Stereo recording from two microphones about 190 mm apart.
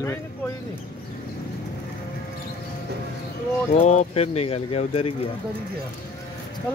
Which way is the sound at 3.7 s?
35° left (ahead or behind).